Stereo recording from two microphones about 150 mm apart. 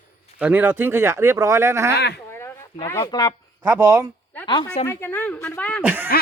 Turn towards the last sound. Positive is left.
turn(degrees=-15)  # may be behind; listen again after turning